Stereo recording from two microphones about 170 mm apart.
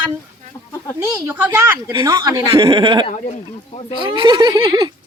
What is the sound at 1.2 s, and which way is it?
Speech, 10° right (ahead or behind).